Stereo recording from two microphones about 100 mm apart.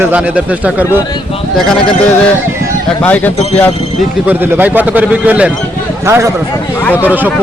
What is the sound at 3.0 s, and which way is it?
Speech, 15° left (ahead or behind).